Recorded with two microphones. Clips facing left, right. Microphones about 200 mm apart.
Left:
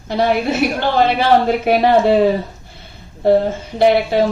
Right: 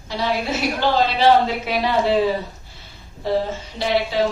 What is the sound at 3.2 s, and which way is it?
Speech, 55° left (ahead or behind).